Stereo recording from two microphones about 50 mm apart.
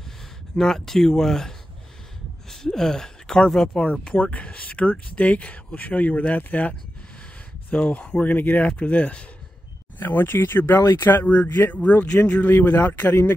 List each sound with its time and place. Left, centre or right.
0.6 s speech: centre
2.5 s speech: centre
3.8 s speech: left
7.7 s speech: left
9.9 s speech: left